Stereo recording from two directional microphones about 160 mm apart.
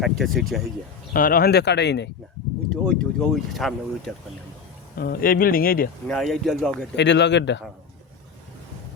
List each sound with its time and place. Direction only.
0.0 s speech: centre (ahead or behind)
1.1 s speech: 65° left (ahead or behind); by 2.0 s 90° left
2.6 s speech: 5° left (ahead or behind)
4.9 s speech: 65° left (ahead or behind)
6.1 s speech: 5° left (ahead or behind)
6.9 s speech: 90° left